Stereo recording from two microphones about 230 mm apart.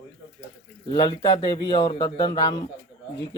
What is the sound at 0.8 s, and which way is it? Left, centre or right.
A man's voice, left.